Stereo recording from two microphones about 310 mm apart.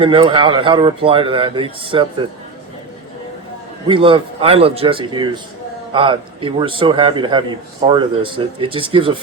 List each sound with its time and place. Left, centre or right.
0.0 s a man's voice: centre
3.8 s a man's voice: centre